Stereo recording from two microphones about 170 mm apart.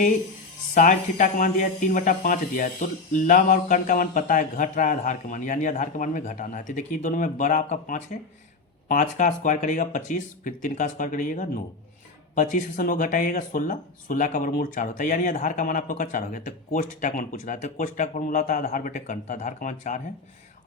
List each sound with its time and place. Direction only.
0.7 s speech: 50° left (ahead or behind)